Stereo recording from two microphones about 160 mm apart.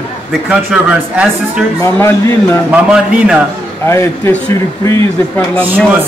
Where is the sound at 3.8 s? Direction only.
15° left (ahead or behind).